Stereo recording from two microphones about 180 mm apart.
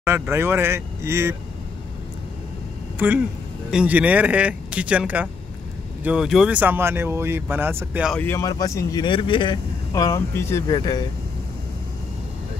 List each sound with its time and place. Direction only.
0.0 s speech: 15° right (ahead or behind)
3.0 s speech: 10° right (ahead or behind)
8.1 s speech: 10° left (ahead or behind)